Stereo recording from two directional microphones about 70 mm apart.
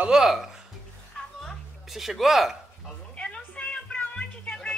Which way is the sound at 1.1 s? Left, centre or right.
Centre.